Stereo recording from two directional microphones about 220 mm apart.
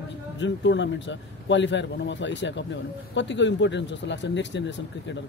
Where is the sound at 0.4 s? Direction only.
55° left (ahead or behind).